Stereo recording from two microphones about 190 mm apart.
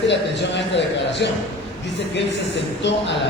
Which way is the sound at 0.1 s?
70° left (ahead or behind).